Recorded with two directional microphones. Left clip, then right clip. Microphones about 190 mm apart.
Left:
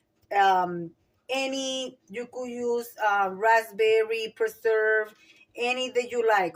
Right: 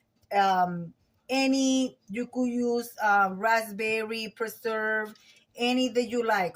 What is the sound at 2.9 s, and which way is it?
Speech, 35° left (ahead or behind).